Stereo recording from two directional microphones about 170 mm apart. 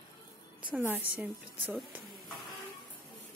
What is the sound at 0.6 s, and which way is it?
A woman's voice, 10° right (ahead or behind).